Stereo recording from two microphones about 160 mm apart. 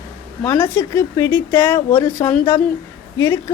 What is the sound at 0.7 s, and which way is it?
A woman's voice, 15° left (ahead or behind).